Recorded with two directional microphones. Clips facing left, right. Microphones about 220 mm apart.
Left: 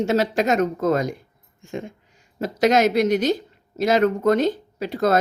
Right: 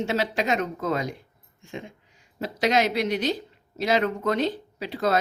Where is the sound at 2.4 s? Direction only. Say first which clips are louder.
Left 5 dB; 45° left (ahead or behind).